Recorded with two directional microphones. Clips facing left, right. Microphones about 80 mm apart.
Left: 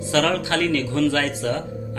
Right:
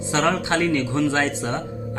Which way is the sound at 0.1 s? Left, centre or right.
Right.